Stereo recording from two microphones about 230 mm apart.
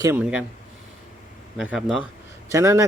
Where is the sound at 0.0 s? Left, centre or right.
Centre.